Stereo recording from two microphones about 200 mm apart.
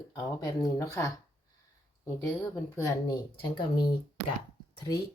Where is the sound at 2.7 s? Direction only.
15° left (ahead or behind).